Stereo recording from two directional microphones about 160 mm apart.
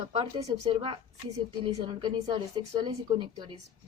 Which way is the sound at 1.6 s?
25° right (ahead or behind).